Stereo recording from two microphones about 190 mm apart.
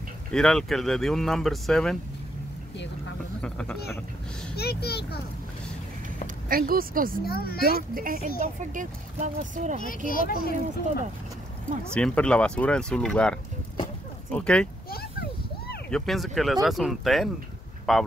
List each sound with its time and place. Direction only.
0.3 s speech: 5° left (ahead or behind)
3.3 s speech: 5° left (ahead or behind)
4.6 s speech: 55° left (ahead or behind)
6.5 s speech: 50° right (ahead or behind)
7.2 s speech: 55° left (ahead or behind)
7.9 s speech: 50° right (ahead or behind)
9.8 s speech: 45° left (ahead or behind)
11.9 s speech: 5° left (ahead or behind)
15.9 s speech: centre (ahead or behind)